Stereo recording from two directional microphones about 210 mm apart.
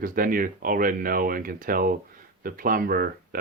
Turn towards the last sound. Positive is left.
turn(degrees=-45)  # may be behind; listen again after turning